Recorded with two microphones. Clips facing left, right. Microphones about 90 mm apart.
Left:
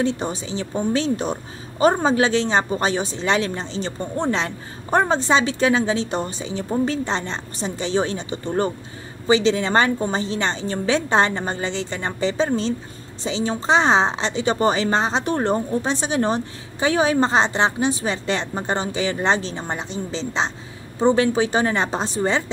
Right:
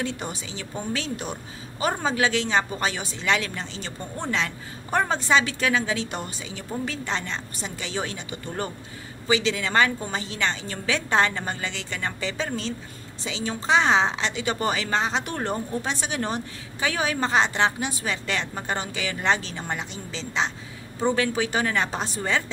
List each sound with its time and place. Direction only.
0.0 s a woman's voice: 25° left (ahead or behind)